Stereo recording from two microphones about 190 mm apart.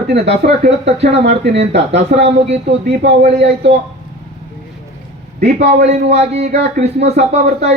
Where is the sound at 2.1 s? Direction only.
50° right (ahead or behind).